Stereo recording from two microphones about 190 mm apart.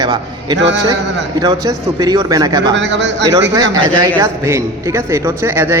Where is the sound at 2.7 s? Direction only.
70° right (ahead or behind).